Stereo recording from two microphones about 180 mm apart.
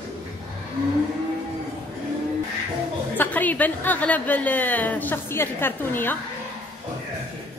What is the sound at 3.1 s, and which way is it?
A woman's voice, 10° left (ahead or behind).